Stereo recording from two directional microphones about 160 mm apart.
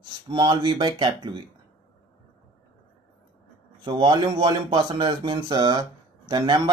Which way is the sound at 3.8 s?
30° right (ahead or behind).